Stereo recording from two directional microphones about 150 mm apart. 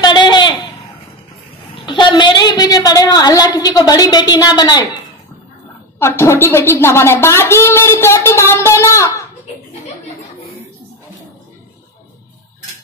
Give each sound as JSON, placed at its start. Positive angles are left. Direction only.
{"t": 0.0, "sound": "a sound", "side_deg": 30}
{"t": 1.9, "sound": "a woman's voice", "side_deg": 30}
{"t": 5.9, "sound": "a woman's voice", "side_deg": 15}